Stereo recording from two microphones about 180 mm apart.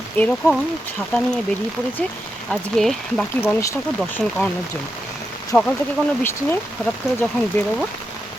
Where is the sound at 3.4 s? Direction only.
15° left (ahead or behind).